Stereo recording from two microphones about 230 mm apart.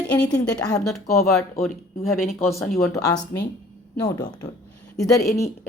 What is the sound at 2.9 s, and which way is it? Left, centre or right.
Speech, centre.